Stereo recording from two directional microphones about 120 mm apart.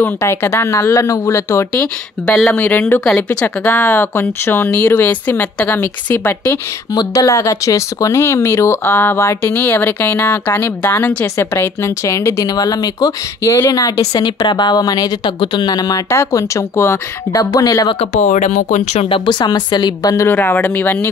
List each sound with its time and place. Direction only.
0.0 s speech: 20° left (ahead or behind)
1.7 s speech: 10° left (ahead or behind)
6.9 s speech: 30° left (ahead or behind)
17.4 s speech: 30° left (ahead or behind)
18.1 s speech: 90° left
19.0 s speech: 45° left (ahead or behind)
20.2 s speech: 15° left (ahead or behind)